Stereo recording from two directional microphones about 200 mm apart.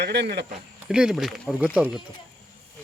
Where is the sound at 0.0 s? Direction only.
55° right (ahead or behind).